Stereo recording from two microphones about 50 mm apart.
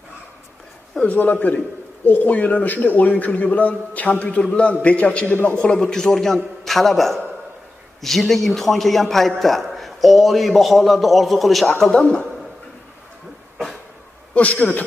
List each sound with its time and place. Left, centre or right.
1.0 s a man's voice: left; by 11.7 s centre
11.8 s a man's voice: centre
14.3 s a man's voice: left